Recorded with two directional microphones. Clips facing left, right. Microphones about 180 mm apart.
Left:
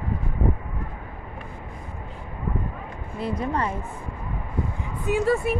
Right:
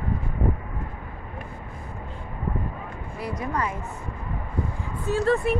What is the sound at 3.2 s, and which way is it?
Speech, 25° left (ahead or behind).